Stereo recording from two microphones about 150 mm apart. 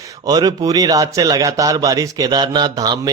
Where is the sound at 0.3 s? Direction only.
25° right (ahead or behind).